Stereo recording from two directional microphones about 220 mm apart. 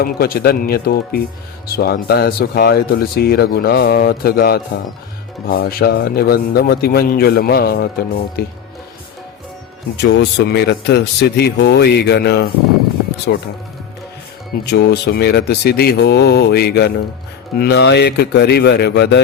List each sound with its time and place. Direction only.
0.0 s a man's voice: 45° left (ahead or behind)
10.0 s a man's voice: 50° left (ahead or behind)
14.6 s a man's voice: 50° left (ahead or behind)